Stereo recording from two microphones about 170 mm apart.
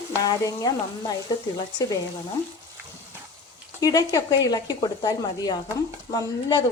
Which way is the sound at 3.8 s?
20° left (ahead or behind).